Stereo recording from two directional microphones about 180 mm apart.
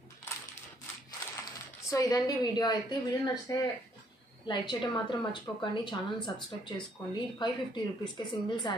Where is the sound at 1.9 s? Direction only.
20° left (ahead or behind).